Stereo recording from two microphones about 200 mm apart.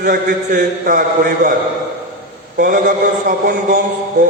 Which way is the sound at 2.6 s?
45° right (ahead or behind).